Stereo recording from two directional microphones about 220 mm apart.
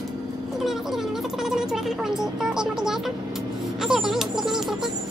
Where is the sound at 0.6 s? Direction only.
Centre (ahead or behind).